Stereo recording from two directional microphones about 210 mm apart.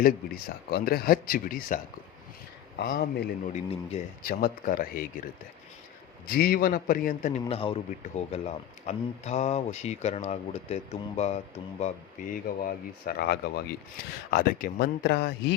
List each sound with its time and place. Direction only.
0.0 s speech: 45° left (ahead or behind)
3.5 s a man's voice: 30° left (ahead or behind)
4.2 s speech: 45° left (ahead or behind)
6.2 s a man's voice: 45° left (ahead or behind)
12.3 s speech: 45° left (ahead or behind)